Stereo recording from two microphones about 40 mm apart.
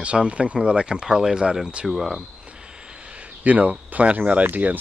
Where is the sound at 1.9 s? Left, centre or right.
Centre.